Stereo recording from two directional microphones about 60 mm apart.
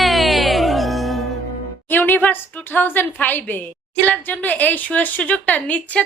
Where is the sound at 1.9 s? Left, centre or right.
Left.